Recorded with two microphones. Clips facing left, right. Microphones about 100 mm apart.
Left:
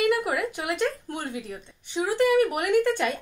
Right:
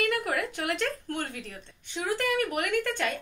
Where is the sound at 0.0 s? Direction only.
20° left (ahead or behind).